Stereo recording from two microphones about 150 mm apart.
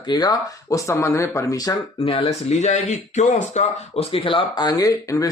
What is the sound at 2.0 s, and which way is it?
Speech, 40° left (ahead or behind).